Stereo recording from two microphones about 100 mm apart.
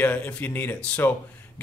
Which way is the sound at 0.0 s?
15° left (ahead or behind).